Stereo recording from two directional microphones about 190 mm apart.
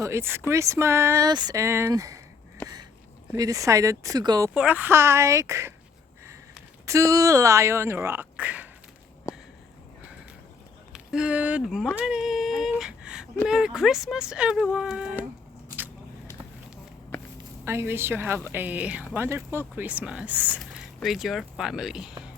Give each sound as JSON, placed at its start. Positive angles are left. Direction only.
{"t": 0.0, "sound": "speech", "side_deg": -15}
{"t": 2.6, "sound": "a sound", "side_deg": 10}
{"t": 3.3, "sound": "speech", "side_deg": -20}
{"t": 4.5, "sound": "speech", "side_deg": -5}
{"t": 6.8, "sound": "speech", "side_deg": -15}
{"t": 10.9, "sound": "speech", "side_deg": -5}
{"t": 17.7, "sound": "speech", "side_deg": -10}